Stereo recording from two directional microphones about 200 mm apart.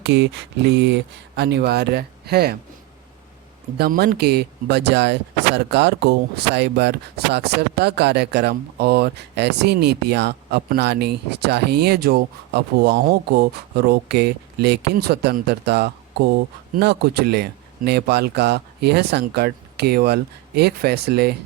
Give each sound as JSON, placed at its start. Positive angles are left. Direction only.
{"t": 0.0, "sound": "speech", "side_deg": -60}
{"t": 3.8, "sound": "a man's voice", "side_deg": -50}